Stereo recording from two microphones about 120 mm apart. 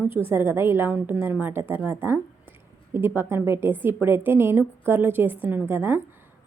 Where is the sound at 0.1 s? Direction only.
20° right (ahead or behind).